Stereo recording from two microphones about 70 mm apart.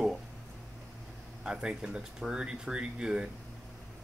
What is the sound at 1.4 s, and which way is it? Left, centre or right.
Speech, centre.